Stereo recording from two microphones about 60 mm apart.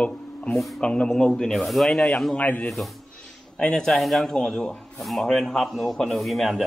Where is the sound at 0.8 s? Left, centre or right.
Centre.